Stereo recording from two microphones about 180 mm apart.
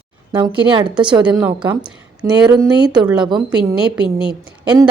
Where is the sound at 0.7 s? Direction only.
25° right (ahead or behind).